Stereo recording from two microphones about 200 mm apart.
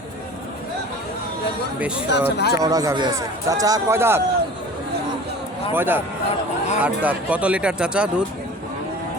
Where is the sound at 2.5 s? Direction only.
15° right (ahead or behind).